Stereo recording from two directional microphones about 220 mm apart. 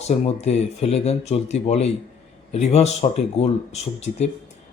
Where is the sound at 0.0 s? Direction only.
30° left (ahead or behind).